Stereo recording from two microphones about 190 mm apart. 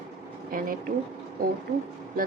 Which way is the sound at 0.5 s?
50° right (ahead or behind).